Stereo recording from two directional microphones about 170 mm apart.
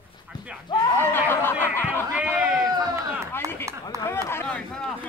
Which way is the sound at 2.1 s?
5° right (ahead or behind).